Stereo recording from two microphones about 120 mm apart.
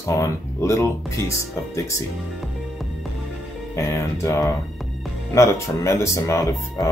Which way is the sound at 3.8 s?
25° left (ahead or behind).